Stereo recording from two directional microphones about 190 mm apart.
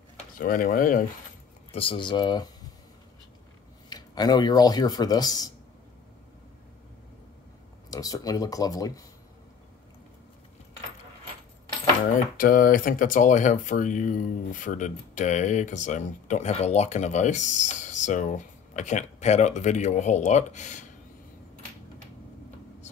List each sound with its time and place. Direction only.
0.4 s speech: 50° left (ahead or behind)
1.7 s speech: 30° left (ahead or behind)
3.9 s speech: 20° left (ahead or behind)
7.9 s speech: 20° left (ahead or behind)
12.4 s speech: 50° left (ahead or behind)